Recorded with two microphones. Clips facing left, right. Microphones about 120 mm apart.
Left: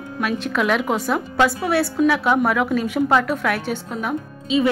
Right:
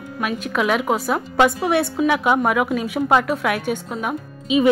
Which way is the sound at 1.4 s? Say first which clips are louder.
Right 2 dB; 20° right (ahead or behind).